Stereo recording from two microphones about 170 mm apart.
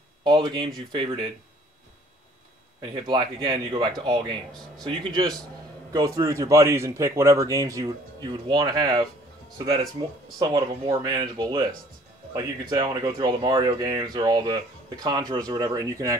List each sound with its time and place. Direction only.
0.2 s speech: 25° right (ahead or behind)
2.9 s speech: 25° right (ahead or behind)
10.4 s speech: 25° right (ahead or behind)